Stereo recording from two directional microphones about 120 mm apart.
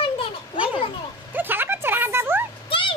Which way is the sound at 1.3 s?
15° right (ahead or behind).